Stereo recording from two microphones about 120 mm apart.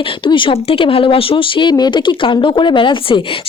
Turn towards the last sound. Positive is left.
turn(degrees=45)  # may be behind; listen again after turning